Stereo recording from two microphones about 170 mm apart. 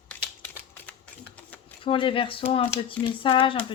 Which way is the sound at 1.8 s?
30° left (ahead or behind).